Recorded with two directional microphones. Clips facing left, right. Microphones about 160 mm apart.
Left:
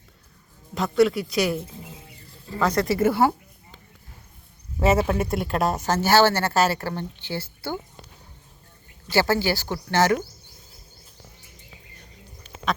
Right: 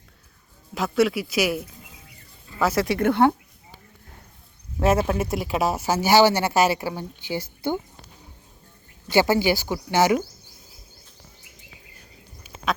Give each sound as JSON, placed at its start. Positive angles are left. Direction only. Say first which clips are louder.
{"t": 0.7, "sound": "a man's voice", "louder": "left 2 dB", "side_deg": 0}
{"t": 1.8, "sound": "a sound", "louder": "left 7 dB", "side_deg": 30}
{"t": 2.6, "sound": "a man's voice", "louder": "even", "side_deg": -5}
{"t": 4.8, "sound": "speech", "louder": "even", "side_deg": 0}
{"t": 9.0, "sound": "speech", "louder": "right 2 dB", "side_deg": -15}
{"t": 11.9, "sound": "duck", "louder": "left 1 dB", "side_deg": -5}